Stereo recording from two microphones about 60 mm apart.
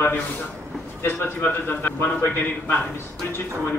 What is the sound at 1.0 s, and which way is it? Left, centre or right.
A man's voice, left.